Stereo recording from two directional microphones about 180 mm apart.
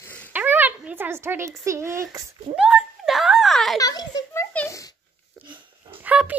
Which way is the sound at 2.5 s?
5° right (ahead or behind).